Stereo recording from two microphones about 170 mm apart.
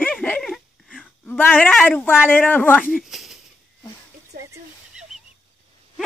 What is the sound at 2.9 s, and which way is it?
Speech, centre (ahead or behind).